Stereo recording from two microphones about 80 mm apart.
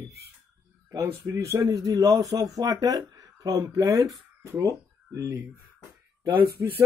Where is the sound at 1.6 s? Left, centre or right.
Right.